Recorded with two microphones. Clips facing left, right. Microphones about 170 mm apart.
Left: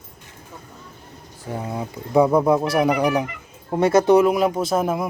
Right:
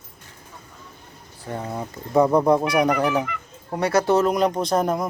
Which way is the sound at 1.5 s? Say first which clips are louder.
Left 1 dB; 10° left (ahead or behind).